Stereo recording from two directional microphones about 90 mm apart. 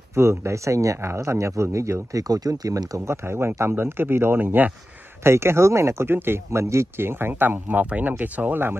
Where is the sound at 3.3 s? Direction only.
30° right (ahead or behind).